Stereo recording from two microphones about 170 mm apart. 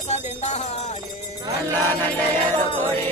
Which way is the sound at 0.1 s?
40° left (ahead or behind).